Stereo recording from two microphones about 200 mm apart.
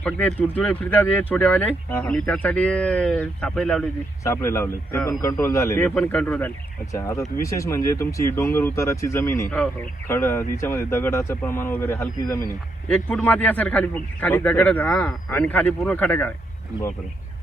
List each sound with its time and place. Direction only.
0.0 s a man's voice: 5° left (ahead or behind)
4.2 s a man's voice: 15° left (ahead or behind)